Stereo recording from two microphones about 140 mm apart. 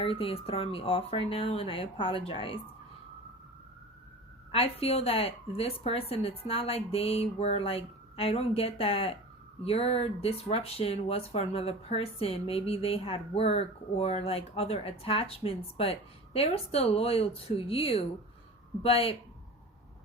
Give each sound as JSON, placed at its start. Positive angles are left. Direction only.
{"t": 0.0, "sound": "speech", "side_deg": 45}
{"t": 4.5, "sound": "speech", "side_deg": 45}